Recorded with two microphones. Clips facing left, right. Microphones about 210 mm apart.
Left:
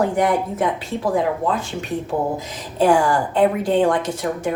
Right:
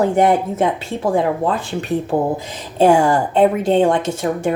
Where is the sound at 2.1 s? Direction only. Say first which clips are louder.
Right 4 dB; 60° right (ahead or behind).